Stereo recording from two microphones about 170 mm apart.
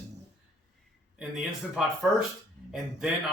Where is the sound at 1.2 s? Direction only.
Centre (ahead or behind).